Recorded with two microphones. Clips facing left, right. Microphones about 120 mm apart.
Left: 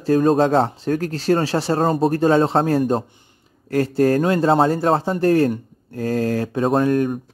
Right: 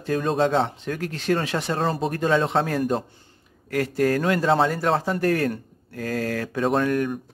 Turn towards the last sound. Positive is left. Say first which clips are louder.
# left 4 dB
turn(degrees=35)  # may be behind; listen again after turning